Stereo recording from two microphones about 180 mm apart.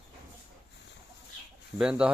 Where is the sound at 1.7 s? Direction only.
5° right (ahead or behind).